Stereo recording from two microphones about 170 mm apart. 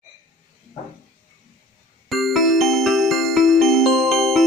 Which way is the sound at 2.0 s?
Centre (ahead or behind).